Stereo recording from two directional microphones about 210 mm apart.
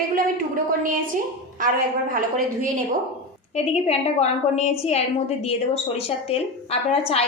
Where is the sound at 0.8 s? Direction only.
40° right (ahead or behind).